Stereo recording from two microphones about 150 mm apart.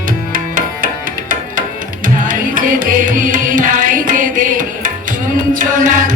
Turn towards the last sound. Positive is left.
turn(degrees=-65)  # may be behind; listen again after turning